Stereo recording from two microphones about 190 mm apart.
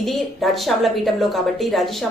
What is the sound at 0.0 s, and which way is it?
A woman's voice, centre (ahead or behind).